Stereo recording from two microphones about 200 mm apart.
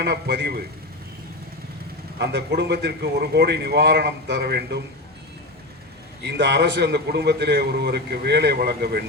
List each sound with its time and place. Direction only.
0.0 s a man's voice: 55° right (ahead or behind)
2.1 s a man's voice: 55° right (ahead or behind)
6.2 s a man's voice: 60° right (ahead or behind)